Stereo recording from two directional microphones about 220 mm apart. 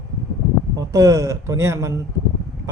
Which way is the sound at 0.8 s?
15° right (ahead or behind).